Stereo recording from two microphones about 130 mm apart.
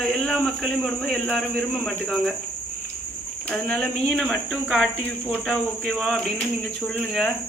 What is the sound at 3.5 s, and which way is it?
A man's voice, 5° left (ahead or behind).